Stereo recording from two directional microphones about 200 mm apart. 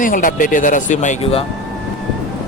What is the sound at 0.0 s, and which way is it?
Speech, 40° left (ahead or behind).